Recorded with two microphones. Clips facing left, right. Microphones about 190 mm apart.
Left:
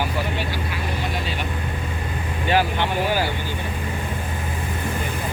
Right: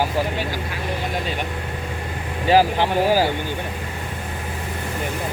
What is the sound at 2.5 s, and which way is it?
Speech, 35° right (ahead or behind).